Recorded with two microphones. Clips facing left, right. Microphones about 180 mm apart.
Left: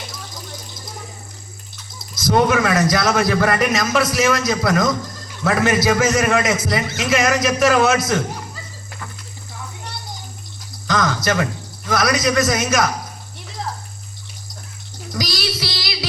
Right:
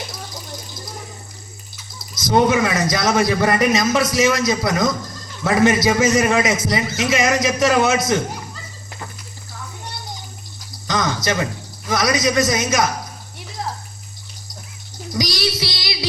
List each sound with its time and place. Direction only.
2.1 s a man's voice: 20° right (ahead or behind)
10.8 s a sound: 20° right (ahead or behind)
11.9 s a man's voice: 20° right (ahead or behind)
15.2 s child singing: 20° right (ahead or behind)